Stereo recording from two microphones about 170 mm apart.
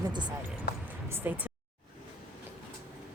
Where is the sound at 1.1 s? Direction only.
10° right (ahead or behind).